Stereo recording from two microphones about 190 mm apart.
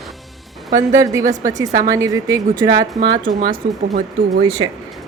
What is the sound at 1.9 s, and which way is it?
Speech, 15° right (ahead or behind).